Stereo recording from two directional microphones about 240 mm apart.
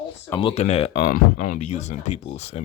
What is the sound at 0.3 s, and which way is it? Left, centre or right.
Speech, left.